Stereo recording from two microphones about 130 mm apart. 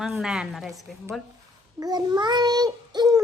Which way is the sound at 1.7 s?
30° right (ahead or behind).